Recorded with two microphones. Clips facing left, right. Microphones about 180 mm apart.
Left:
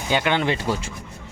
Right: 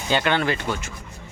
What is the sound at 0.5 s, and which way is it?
Speech, 30° left (ahead or behind).